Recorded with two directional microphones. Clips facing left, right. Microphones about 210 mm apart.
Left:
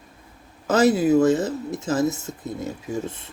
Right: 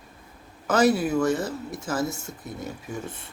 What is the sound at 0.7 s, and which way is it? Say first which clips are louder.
Speech: left 4 dB; 25° left (ahead or behind).